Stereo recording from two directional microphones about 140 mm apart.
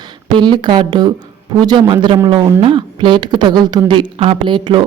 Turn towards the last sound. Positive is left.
turn(degrees=-35)  # may be behind; listen again after turning